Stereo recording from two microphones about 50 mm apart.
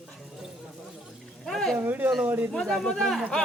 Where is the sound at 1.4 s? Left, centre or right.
Centre.